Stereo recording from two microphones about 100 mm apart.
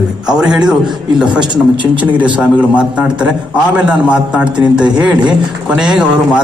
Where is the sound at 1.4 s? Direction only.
50° right (ahead or behind).